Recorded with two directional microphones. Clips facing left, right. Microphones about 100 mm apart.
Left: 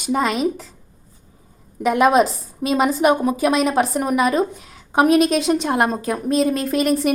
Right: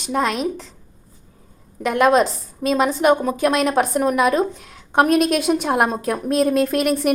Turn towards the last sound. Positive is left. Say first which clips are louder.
# right 1 dB
turn(degrees=0)  # may be behind; listen again after turning